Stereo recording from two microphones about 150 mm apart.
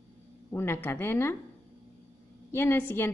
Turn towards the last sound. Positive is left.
turn(degrees=15)  # may be behind; listen again after turning